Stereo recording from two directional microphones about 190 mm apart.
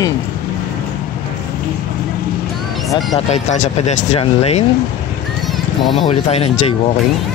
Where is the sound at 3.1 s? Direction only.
35° left (ahead or behind).